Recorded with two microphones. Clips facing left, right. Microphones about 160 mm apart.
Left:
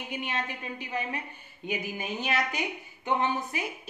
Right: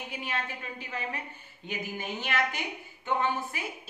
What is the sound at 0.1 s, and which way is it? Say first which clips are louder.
A woman's voice: left 3 dB; 20° left (ahead or behind).